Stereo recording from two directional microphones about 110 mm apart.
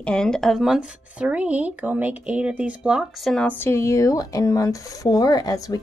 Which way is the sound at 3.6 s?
25° left (ahead or behind).